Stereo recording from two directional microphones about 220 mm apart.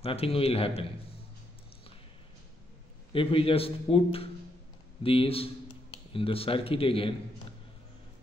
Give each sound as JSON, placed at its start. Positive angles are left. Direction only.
{"t": 0.0, "sound": "a man's voice", "side_deg": 25}
{"t": 3.1, "sound": "a man's voice", "side_deg": 25}